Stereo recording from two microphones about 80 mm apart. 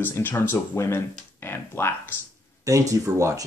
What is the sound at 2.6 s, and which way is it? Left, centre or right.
Speech, right.